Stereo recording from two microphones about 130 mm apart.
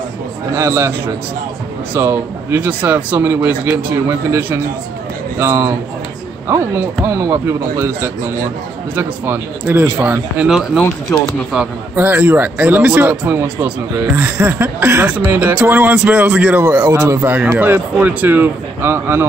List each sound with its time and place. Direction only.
0.6 s speech: 20° right (ahead or behind); by 10.8 s 5° right (ahead or behind)
10.8 s speech: 15° left (ahead or behind)
11.5 s speech: 10° right (ahead or behind)